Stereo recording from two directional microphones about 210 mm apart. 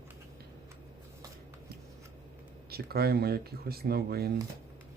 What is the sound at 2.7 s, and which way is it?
Speech, 50° right (ahead or behind).